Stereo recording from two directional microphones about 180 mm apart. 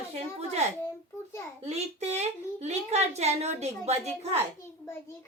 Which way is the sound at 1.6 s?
35° right (ahead or behind).